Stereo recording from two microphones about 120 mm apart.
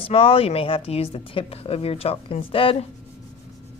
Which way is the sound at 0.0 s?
50° left (ahead or behind).